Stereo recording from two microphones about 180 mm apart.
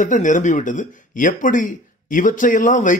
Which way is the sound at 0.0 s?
45° left (ahead or behind).